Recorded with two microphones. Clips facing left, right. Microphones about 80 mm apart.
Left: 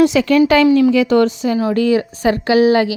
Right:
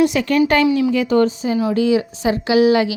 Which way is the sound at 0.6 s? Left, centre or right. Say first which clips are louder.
Left 5 dB; left.